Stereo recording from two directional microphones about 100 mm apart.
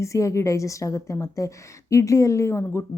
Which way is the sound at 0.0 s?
30° left (ahead or behind).